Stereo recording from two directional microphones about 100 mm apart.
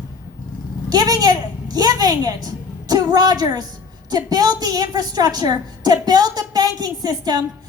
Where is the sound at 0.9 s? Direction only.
40° right (ahead or behind).